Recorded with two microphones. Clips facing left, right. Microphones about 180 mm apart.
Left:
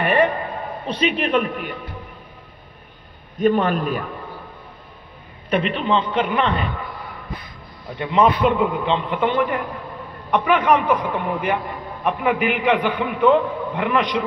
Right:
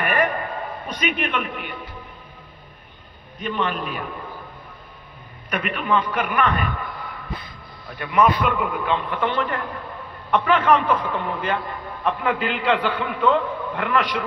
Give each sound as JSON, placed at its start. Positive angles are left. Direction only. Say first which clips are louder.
{"t": 0.0, "sound": "a sound", "louder": "left 4 dB", "side_deg": 25}
{"t": 0.8, "sound": "a man's voice", "louder": "left 5 dB", "side_deg": 30}
{"t": 3.3, "sound": "a man's voice", "louder": "left 8 dB", "side_deg": 45}
{"t": 5.5, "sound": "a man's voice", "louder": "left 3 dB", "side_deg": 25}
{"t": 7.9, "sound": "a man's voice", "louder": "left 2 dB", "side_deg": 25}